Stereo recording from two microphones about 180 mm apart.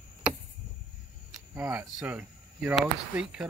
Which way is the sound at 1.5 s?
15° right (ahead or behind).